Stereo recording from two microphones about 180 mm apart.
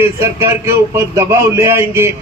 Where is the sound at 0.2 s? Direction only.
15° right (ahead or behind).